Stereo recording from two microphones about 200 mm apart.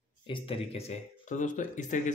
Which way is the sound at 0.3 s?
30° left (ahead or behind).